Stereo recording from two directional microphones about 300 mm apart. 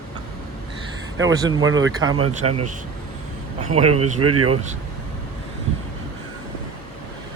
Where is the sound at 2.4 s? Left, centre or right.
Right.